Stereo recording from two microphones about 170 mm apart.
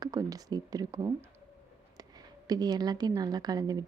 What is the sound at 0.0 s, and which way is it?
A woman's voice, 20° right (ahead or behind).